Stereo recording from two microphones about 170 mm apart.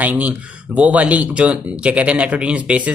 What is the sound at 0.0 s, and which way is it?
Speech, 10° right (ahead or behind).